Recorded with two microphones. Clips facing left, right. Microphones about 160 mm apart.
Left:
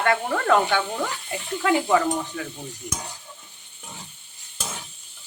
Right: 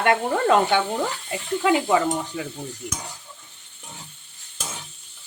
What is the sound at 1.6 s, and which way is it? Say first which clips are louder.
Speech: even; 20° right (ahead or behind).